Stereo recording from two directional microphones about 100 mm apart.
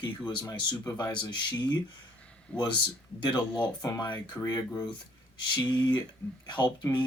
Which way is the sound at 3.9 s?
45° left (ahead or behind).